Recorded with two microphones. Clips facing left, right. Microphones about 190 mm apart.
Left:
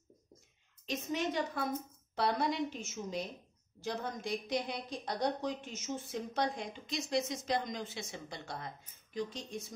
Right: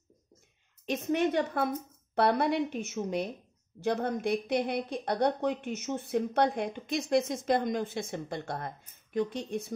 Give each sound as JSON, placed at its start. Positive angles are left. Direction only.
{"t": 0.8, "sound": "a woman's voice", "side_deg": -55}